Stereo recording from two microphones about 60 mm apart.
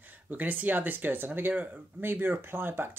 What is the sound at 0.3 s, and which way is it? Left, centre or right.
Speech, right.